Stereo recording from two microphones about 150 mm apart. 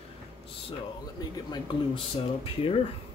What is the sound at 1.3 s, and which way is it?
Speech, 30° left (ahead or behind).